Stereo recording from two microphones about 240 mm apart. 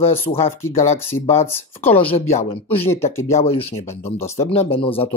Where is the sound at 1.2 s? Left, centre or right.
Left.